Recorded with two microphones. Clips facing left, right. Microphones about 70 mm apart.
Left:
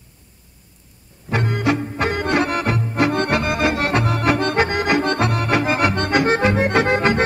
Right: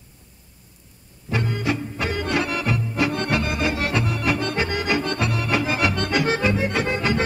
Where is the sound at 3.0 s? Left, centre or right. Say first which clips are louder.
Left 5 dB; left.